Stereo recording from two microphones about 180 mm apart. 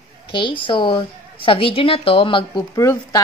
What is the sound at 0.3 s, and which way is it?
A woman's voice, 30° left (ahead or behind).